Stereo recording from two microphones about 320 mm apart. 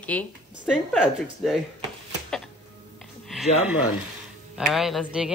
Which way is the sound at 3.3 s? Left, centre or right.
Centre.